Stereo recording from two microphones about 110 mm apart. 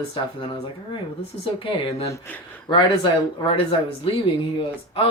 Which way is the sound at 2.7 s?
45° left (ahead or behind).